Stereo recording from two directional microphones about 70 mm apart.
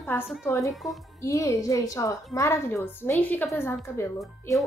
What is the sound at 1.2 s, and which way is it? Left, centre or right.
A woman's voice, left.